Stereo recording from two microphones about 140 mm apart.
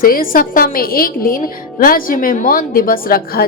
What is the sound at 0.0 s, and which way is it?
A woman's voice, 90° left.